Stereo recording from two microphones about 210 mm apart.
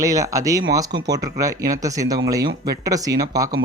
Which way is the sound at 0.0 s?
15° right (ahead or behind).